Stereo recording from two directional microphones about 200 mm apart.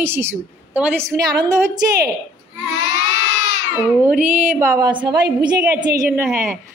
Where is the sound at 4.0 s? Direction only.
10° right (ahead or behind).